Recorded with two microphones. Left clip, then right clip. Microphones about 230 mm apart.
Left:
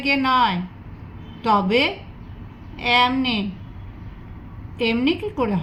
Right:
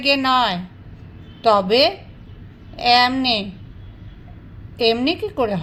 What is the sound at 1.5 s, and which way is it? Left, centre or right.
Speech, right.